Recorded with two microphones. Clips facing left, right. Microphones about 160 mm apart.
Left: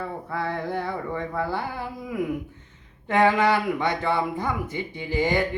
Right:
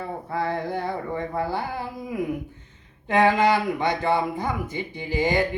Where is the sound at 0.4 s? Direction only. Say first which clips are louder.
Right 1 dB; 15° right (ahead or behind).